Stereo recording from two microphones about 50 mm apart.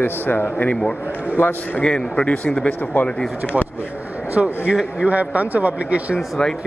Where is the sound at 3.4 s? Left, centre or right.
Centre.